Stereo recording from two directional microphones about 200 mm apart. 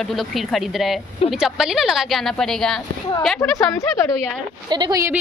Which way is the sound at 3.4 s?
20° left (ahead or behind).